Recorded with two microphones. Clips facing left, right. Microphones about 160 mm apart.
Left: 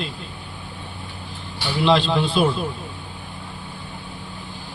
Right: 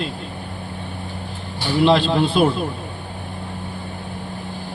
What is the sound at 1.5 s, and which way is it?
Speech, 50° right (ahead or behind).